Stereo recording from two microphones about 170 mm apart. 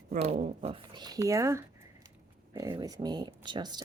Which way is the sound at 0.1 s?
40° right (ahead or behind).